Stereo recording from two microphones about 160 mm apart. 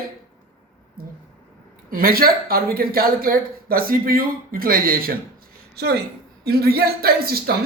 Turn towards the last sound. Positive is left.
turn(degrees=-75)  # may be behind; listen again after turning